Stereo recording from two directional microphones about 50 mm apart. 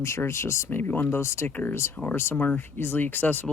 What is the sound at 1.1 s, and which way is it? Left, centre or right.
Speech, left.